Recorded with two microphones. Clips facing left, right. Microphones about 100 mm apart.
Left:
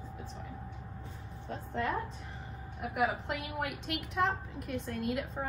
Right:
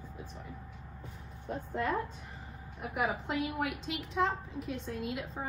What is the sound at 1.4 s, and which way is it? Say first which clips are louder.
Speech: right 1 dB; 10° right (ahead or behind).